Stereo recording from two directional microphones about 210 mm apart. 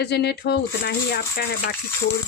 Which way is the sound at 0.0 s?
50° left (ahead or behind).